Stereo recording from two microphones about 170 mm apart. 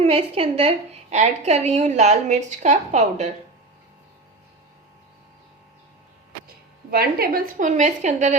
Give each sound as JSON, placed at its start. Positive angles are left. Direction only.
{"t": 0.0, "sound": "a woman's voice", "side_deg": -35}
{"t": 6.9, "sound": "a woman's voice", "side_deg": -60}